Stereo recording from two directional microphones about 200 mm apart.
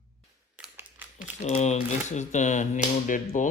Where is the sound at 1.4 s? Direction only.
35° left (ahead or behind).